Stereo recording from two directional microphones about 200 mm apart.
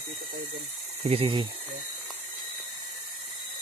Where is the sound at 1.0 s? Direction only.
30° right (ahead or behind).